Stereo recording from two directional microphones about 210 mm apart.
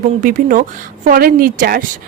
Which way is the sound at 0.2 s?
40° right (ahead or behind).